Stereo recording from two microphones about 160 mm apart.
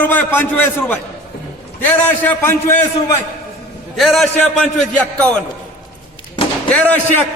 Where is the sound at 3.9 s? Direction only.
Centre (ahead or behind).